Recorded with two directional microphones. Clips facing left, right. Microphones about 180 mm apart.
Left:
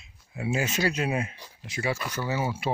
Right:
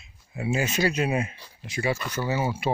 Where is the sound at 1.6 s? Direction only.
Centre (ahead or behind).